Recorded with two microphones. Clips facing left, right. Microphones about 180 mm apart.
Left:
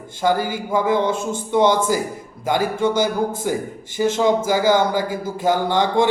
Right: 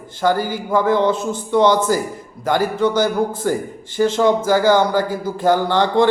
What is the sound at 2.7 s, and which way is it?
Speech, 50° left (ahead or behind).